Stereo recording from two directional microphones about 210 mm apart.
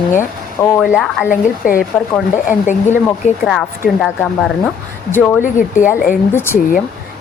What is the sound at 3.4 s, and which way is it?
A woman's voice, centre (ahead or behind).